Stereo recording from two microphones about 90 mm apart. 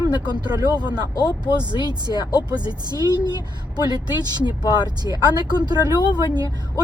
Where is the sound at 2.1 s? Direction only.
35° right (ahead or behind).